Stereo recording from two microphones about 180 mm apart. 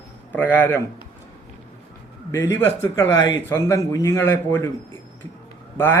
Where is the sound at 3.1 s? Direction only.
90° left.